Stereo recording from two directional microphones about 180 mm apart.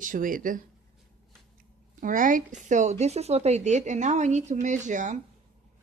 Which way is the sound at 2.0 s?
45° right (ahead or behind).